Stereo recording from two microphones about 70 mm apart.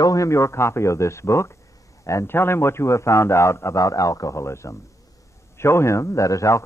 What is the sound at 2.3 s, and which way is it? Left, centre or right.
A man's voice, left.